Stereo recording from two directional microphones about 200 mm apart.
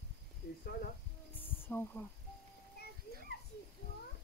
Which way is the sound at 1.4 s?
10° left (ahead or behind).